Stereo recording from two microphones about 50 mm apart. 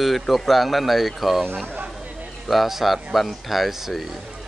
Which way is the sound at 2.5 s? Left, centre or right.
Centre.